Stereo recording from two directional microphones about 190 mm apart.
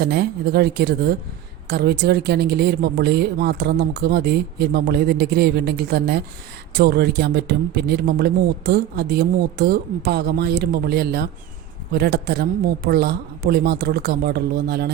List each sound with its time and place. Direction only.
0.0 s a woman's voice: 55° right (ahead or behind)